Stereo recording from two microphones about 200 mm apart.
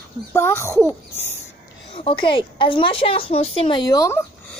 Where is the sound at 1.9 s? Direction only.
25° left (ahead or behind).